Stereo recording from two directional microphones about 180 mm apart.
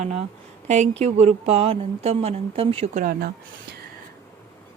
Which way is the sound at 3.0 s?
55° right (ahead or behind).